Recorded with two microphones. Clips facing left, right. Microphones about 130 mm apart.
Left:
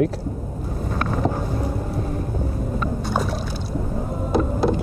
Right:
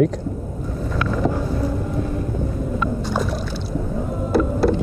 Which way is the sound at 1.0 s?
40° left (ahead or behind).